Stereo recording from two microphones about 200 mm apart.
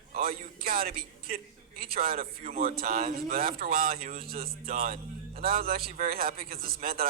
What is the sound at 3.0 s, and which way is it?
A man's voice, 45° right (ahead or behind).